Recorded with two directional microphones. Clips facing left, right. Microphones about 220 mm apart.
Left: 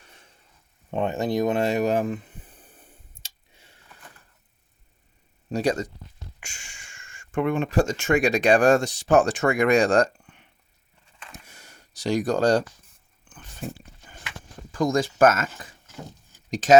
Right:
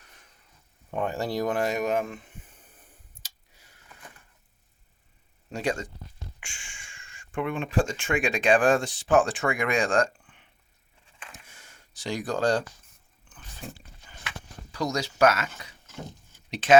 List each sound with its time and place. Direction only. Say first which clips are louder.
0.9 s speech: left 4 dB; 25° left (ahead or behind)
3.2 s chewing: left 3 dB; 25° left (ahead or behind)
5.5 s speech: left 5 dB; 35° left (ahead or behind)
11.4 s a sound: left 4 dB; 40° left (ahead or behind)
14.7 s speech: left 6 dB; 50° left (ahead or behind)